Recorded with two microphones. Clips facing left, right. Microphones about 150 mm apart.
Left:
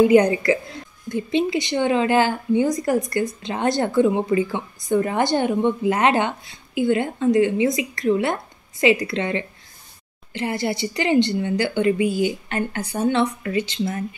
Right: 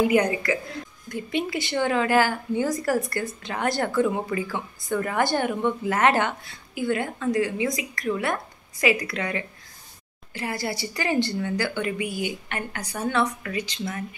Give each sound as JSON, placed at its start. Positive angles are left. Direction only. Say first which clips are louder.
{"t": 0.1, "sound": "a woman's voice", "louder": "left 6 dB", "side_deg": 25}